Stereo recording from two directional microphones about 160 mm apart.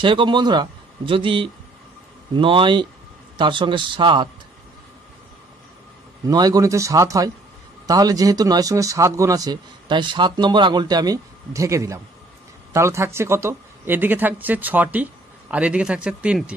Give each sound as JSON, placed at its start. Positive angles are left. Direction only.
{"t": 0.0, "sound": "a man's voice", "side_deg": -30}
{"t": 6.2, "sound": "speech", "side_deg": -25}